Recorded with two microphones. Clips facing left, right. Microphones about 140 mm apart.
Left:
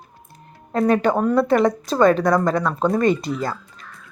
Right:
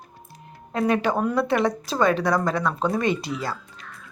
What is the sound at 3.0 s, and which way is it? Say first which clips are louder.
Speech: left 5 dB; 45° left (ahead or behind).